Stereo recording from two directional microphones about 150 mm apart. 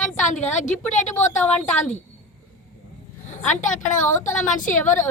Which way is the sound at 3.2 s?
55° left (ahead or behind).